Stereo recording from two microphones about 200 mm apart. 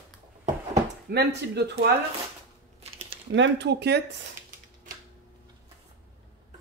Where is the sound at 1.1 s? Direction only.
55° right (ahead or behind).